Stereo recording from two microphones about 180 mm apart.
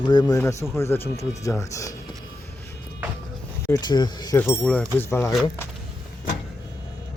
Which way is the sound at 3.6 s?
20° left (ahead or behind).